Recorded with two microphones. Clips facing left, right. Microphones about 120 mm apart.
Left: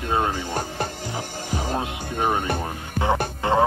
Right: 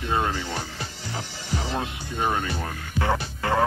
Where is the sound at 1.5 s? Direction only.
50° left (ahead or behind).